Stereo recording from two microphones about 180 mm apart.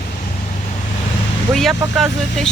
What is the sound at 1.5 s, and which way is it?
Speech, centre (ahead or behind).